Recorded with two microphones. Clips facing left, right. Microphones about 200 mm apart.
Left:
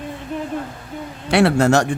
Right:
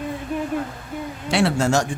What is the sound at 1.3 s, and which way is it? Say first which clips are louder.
Speech: left 5 dB; 60° left (ahead or behind).